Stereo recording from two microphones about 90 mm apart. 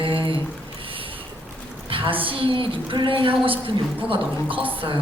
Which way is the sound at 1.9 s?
75° right (ahead or behind).